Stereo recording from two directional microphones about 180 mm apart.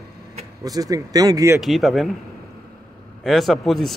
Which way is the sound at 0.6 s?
20° right (ahead or behind).